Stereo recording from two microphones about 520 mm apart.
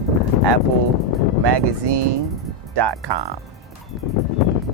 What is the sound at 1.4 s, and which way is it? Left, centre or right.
Speech, right.